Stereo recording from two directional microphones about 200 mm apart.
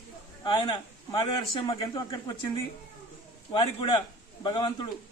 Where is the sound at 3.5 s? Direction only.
20° left (ahead or behind).